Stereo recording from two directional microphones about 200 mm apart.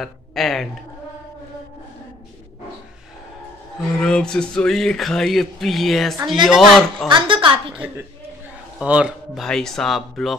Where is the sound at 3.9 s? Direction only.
5° left (ahead or behind).